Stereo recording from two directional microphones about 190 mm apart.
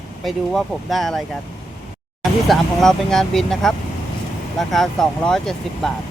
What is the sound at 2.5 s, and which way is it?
Speech, centre (ahead or behind).